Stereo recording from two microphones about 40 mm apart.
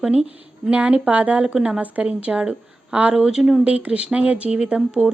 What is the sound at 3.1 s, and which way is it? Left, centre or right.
Speech, centre.